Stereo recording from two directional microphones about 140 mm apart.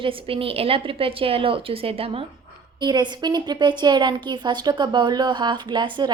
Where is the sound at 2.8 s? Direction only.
30° right (ahead or behind).